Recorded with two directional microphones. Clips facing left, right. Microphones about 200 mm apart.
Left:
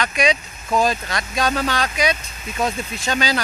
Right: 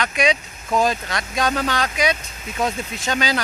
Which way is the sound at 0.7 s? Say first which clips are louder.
Even; 20° right (ahead or behind).